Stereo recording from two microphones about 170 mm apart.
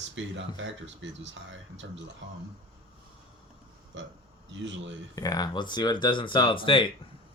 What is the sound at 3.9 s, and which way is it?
Speech, 90° right.